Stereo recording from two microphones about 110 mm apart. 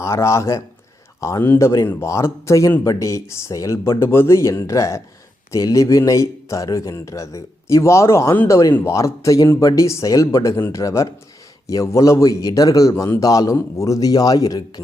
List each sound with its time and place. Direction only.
0.0 s a man's voice: 25° left (ahead or behind)